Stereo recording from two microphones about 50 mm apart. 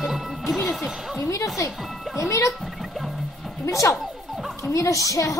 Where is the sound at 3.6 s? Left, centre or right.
Left.